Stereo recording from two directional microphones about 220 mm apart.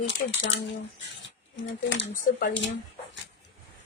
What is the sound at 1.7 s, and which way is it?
Speech, 55° left (ahead or behind).